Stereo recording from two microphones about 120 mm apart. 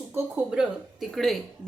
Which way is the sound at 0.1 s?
20° right (ahead or behind).